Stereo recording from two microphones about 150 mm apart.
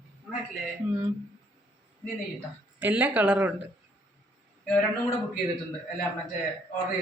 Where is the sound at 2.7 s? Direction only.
10° right (ahead or behind).